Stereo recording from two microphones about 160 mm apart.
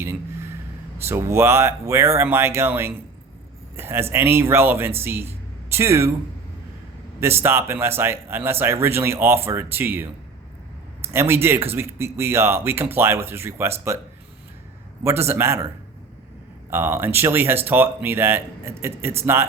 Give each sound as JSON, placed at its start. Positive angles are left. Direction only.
{"t": 0.0, "sound": "a sound", "side_deg": -15}
{"t": 1.0, "sound": "speech", "side_deg": -15}
{"t": 7.2, "sound": "speech", "side_deg": -15}
{"t": 15.0, "sound": "speech", "side_deg": -15}
{"t": 16.6, "sound": "speech", "side_deg": -15}